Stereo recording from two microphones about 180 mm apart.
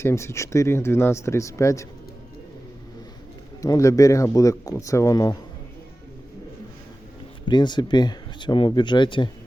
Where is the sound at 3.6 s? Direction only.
20° left (ahead or behind).